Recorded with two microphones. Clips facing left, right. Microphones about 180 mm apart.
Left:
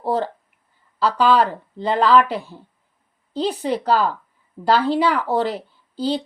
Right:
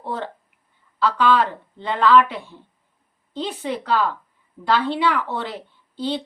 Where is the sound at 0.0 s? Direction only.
40° left (ahead or behind).